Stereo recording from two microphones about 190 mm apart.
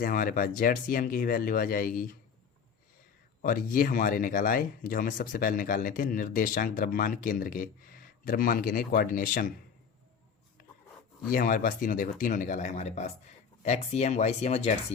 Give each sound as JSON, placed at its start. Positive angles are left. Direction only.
{"t": 0.0, "sound": "speech", "side_deg": 45}
{"t": 3.4, "sound": "speech", "side_deg": 45}
{"t": 11.3, "sound": "speech", "side_deg": 45}